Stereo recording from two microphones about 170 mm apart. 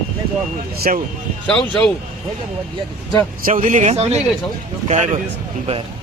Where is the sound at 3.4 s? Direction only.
50° right (ahead or behind).